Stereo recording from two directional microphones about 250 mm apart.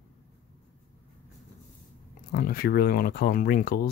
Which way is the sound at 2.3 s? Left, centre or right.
Left.